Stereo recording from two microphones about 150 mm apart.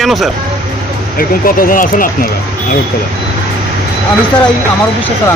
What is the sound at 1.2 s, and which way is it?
Speech, 75° left (ahead or behind).